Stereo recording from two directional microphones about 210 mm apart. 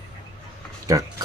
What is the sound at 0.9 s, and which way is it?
Speech, 15° right (ahead or behind).